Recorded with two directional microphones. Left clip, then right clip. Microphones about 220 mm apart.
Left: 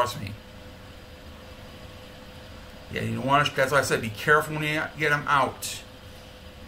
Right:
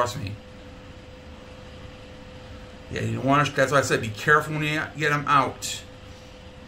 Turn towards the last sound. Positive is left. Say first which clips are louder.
# right 2 dB
turn(degrees=-25)  # may be behind; listen again after turning